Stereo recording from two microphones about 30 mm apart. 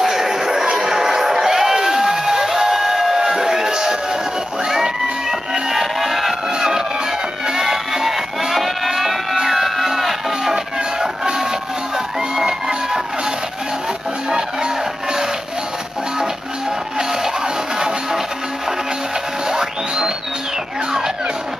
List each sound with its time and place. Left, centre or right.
0.0 s music: centre
3.2 s music: centre
5.5 s music: centre
7.4 s music: centre
8.5 s music: centre
10.5 s music: right
12.4 s music: centre
17.7 s music: right